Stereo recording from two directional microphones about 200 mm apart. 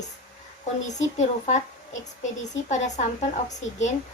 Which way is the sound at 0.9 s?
35° left (ahead or behind).